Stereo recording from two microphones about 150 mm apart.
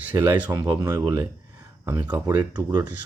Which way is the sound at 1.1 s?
25° right (ahead or behind).